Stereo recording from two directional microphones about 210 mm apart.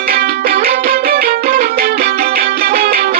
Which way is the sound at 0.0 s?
45° right (ahead or behind).